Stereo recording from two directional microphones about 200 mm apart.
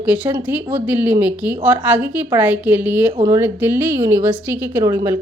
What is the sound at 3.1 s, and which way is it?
A woman's voice, 20° right (ahead or behind).